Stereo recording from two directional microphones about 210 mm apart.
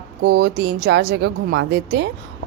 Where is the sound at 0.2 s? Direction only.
50° right (ahead or behind).